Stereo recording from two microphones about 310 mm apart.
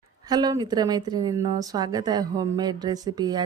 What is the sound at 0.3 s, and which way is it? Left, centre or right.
A woman's voice, centre.